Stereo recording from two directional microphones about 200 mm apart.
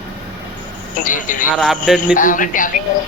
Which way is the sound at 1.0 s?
40° left (ahead or behind).